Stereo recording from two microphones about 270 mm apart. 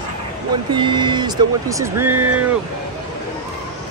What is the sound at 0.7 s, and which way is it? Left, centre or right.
Speech, centre.